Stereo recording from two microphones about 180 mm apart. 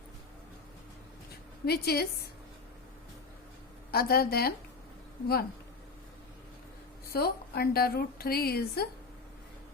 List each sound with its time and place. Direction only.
1.6 s a woman's voice: 60° left (ahead or behind)
3.9 s a woman's voice: 60° left (ahead or behind)
7.1 s a woman's voice: 60° left (ahead or behind)